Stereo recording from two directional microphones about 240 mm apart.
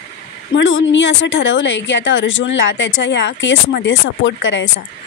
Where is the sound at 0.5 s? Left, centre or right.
Left.